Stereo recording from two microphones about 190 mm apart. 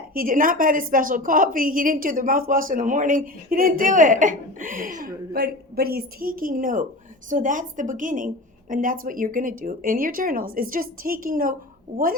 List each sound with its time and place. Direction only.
0.1 s speech: 50° right (ahead or behind)